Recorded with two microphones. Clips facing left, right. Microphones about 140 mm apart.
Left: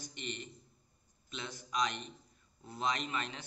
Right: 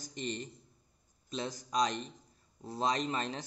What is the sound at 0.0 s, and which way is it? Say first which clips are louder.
A man's voice: right 5 dB; 35° right (ahead or behind).